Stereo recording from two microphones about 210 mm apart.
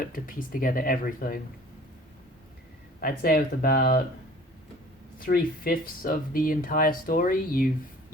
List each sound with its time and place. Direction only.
0.0 s speech: 40° left (ahead or behind)
3.0 s speech: 45° left (ahead or behind)
5.2 s speech: 45° left (ahead or behind)